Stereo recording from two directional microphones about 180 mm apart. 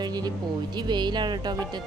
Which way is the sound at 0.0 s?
20° right (ahead or behind).